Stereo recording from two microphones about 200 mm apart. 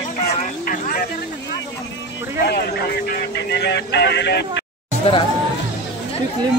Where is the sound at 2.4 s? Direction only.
55° left (ahead or behind).